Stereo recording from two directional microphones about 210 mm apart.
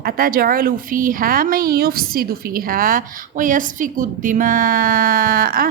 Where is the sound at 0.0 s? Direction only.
45° right (ahead or behind).